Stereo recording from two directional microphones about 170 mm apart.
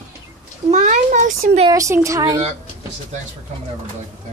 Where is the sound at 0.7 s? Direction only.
45° right (ahead or behind).